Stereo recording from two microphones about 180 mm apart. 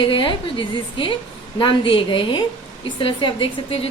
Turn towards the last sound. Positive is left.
turn(degrees=30)  # may be behind; listen again after turning